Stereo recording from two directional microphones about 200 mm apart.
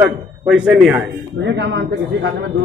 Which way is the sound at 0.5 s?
5° right (ahead or behind).